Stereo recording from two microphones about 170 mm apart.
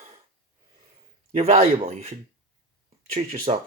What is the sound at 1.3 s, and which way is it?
Speech, 40° right (ahead or behind).